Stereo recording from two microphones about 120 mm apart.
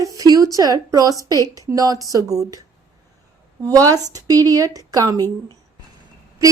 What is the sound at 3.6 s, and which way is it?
A woman's voice, 30° right (ahead or behind).